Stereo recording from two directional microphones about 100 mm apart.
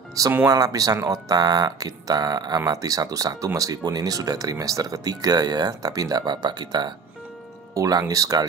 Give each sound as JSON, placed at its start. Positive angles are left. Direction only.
{"t": 0.2, "sound": "speech", "side_deg": -35}
{"t": 7.7, "sound": "speech", "side_deg": -35}